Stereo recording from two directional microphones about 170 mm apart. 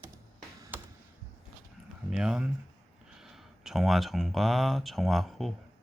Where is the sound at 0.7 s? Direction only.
10° right (ahead or behind).